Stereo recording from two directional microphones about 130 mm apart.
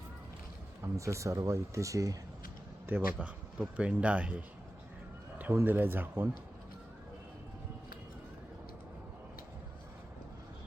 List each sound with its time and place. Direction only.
0.8 s speech: 25° right (ahead or behind)
2.8 s speech: 15° right (ahead or behind)